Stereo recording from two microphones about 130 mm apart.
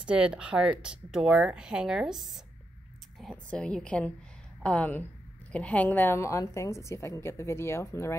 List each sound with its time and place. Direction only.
0.0 s a woman's voice: 10° right (ahead or behind); by 8.2 s 20° left (ahead or behind)